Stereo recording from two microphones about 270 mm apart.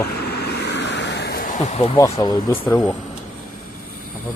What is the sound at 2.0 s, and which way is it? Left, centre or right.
Speech, centre.